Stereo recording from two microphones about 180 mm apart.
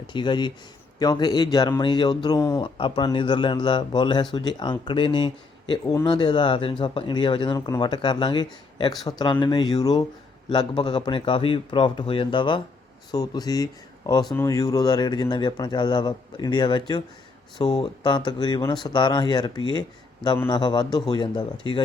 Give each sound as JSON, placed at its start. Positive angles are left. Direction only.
{"t": 0.1, "sound": "speech", "side_deg": 25}